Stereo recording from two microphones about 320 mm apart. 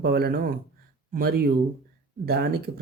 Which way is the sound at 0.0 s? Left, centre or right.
Right.